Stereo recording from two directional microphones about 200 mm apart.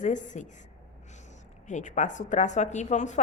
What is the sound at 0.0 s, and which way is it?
A woman's voice, 35° left (ahead or behind).